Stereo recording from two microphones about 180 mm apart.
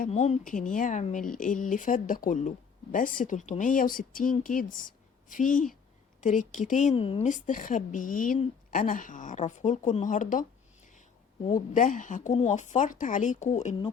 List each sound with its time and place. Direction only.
0.0 s speech: 40° left (ahead or behind)
6.9 s speech: 30° left (ahead or behind)
11.7 s speech: 45° left (ahead or behind)